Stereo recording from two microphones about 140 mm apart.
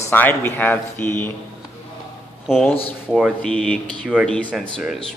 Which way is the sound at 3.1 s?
5° right (ahead or behind).